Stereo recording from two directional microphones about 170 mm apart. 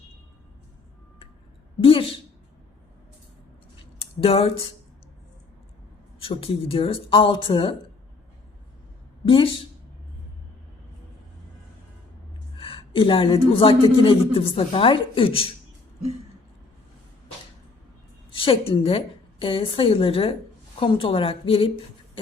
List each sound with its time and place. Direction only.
1.8 s a woman's voice: 30° left (ahead or behind)
3.9 s a sound: 35° left (ahead or behind)
6.1 s a woman's voice: 30° left (ahead or behind)
9.2 s a woman's voice: 30° left (ahead or behind)
12.5 s a woman's voice: 35° left (ahead or behind)
18.3 s a woman's voice: 30° left (ahead or behind)